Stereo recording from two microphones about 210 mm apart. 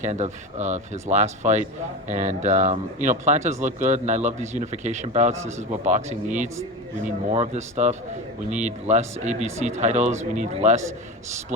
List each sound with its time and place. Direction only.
0.0 s speech: 35° right (ahead or behind)